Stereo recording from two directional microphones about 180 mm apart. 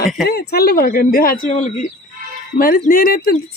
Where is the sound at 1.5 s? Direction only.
40° left (ahead or behind).